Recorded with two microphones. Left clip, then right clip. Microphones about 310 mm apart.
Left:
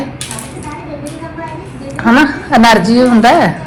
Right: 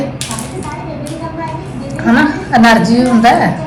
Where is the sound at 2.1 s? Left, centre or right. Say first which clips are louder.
Left 1 dB; left.